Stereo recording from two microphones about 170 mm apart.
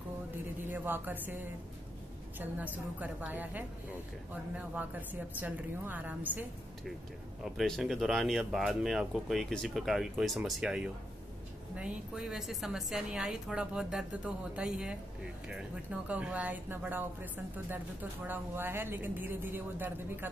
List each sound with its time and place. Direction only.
0.7 s a woman's voice: 10° right (ahead or behind)
7.4 s speech: centre (ahead or behind)